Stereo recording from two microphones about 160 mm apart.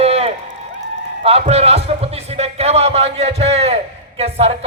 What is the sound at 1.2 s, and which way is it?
Speech, 40° right (ahead or behind).